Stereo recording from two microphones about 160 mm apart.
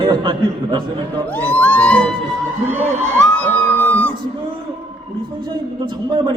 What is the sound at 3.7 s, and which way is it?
Music, 10° left (ahead or behind).